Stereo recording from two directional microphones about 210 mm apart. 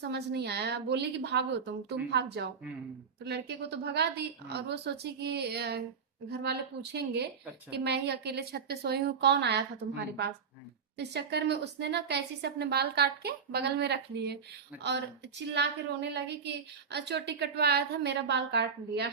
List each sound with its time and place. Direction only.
0.0 s a woman's voice: 55° right (ahead or behind)
10.9 s a woman's voice: 55° right (ahead or behind)